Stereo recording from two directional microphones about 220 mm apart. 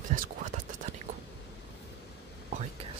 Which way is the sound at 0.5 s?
35° right (ahead or behind).